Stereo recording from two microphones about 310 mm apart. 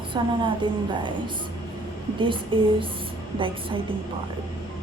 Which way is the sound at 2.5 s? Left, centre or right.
Centre.